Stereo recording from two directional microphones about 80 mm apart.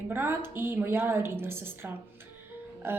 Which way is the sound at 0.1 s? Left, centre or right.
Right.